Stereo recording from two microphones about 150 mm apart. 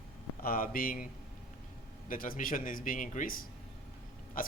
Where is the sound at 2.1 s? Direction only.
65° left (ahead or behind).